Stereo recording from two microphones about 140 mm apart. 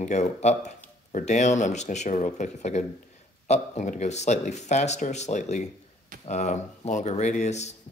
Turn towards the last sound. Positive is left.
turn(degrees=55)  # may be behind; listen again after turning